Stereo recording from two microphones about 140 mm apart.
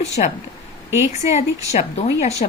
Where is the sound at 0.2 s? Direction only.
60° left (ahead or behind).